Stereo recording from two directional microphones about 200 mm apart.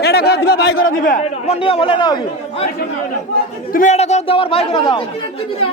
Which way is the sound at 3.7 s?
35° left (ahead or behind).